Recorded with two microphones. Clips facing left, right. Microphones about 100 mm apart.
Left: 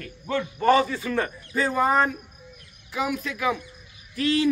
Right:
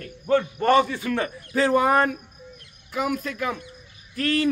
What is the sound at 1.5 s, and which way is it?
Speech, 85° right.